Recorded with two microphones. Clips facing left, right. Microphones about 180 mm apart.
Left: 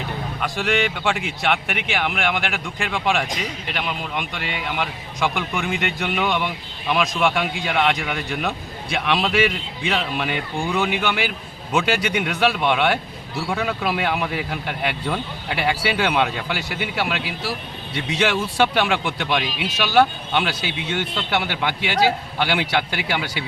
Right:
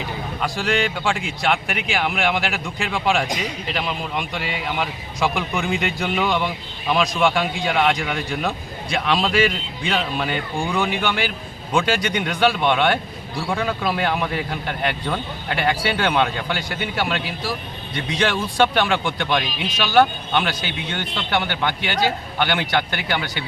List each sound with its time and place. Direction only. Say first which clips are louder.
0.4 s a man's voice: even; centre (ahead or behind)